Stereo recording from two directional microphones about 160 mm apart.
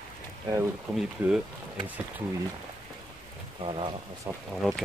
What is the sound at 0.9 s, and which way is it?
Speech, 5° right (ahead or behind).